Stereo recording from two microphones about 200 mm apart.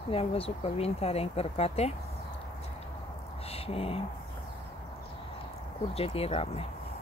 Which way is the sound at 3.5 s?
30° left (ahead or behind).